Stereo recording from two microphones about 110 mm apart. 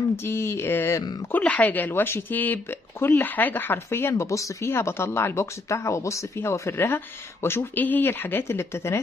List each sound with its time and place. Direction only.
0.1 s speech: 20° left (ahead or behind)